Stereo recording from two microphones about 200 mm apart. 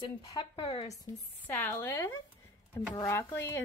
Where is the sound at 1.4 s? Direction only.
10° left (ahead or behind).